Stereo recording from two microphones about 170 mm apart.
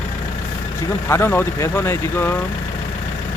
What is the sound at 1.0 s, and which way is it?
Speech, 15° left (ahead or behind).